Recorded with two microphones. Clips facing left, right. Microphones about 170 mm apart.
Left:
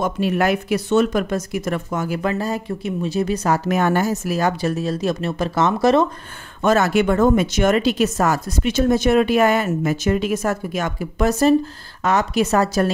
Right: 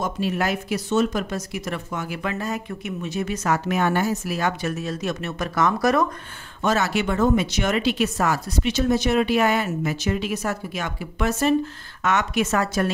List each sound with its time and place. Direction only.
0.0 s speech: 60° left (ahead or behind); by 6.0 s 25° left (ahead or behind)
6.6 s speech: 50° left (ahead or behind)